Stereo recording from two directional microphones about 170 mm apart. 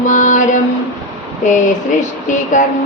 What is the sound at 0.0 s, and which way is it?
Mantra, 45° left (ahead or behind).